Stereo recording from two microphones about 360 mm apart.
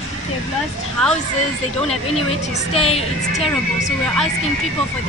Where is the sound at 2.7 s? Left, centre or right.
Centre.